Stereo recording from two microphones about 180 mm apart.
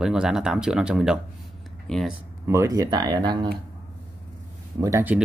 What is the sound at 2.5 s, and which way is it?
Speech, 15° right (ahead or behind).